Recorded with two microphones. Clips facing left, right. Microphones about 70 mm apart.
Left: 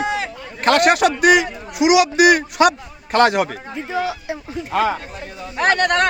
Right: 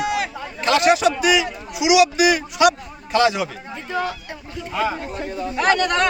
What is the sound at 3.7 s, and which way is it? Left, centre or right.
Speech, centre.